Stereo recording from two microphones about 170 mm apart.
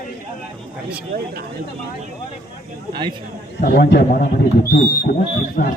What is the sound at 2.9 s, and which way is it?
Speech, 30° right (ahead or behind).